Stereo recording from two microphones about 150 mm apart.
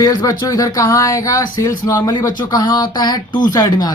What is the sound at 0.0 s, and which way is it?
Speech, 25° left (ahead or behind).